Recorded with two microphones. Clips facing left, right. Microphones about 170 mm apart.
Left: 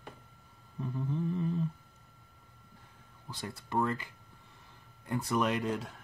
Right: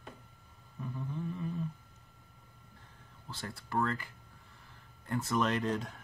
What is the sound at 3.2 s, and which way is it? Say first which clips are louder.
Speech: left 2 dB; 15° left (ahead or behind).